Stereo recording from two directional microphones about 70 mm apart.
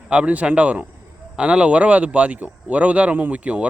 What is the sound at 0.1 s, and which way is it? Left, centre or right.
Speech, centre.